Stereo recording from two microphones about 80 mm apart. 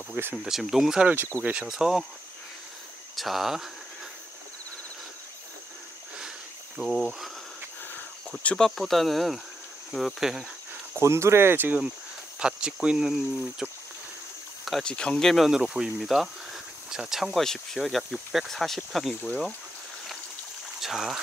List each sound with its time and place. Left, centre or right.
0.1 s speech: right
0.5 s speech: centre
3.2 s speech: centre
6.8 s speech: centre
8.4 s speech: centre
8.6 s speech: centre
11.0 s speech: right
12.4 s speech: centre
14.6 s insect: centre
14.9 s speech: centre
20.8 s speech: centre